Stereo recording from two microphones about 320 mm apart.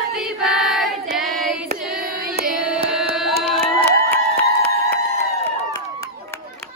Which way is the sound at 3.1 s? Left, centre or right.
Centre.